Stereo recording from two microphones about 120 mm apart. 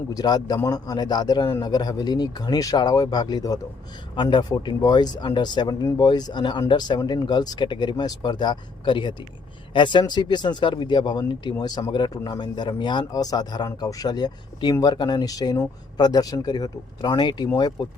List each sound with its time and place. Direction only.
0.1 s speech: 30° left (ahead or behind)